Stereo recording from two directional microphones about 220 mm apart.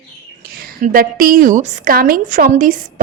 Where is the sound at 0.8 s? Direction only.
40° right (ahead or behind).